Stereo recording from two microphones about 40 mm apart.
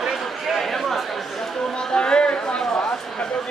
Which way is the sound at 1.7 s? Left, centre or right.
Left.